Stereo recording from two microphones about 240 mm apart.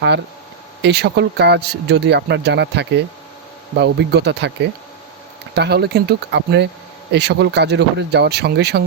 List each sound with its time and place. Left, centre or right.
0.8 s speech: right
5.5 s speech: right